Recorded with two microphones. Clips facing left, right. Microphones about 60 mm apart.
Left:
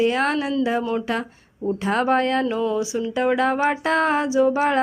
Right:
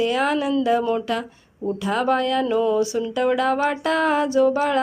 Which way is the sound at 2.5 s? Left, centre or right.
Centre.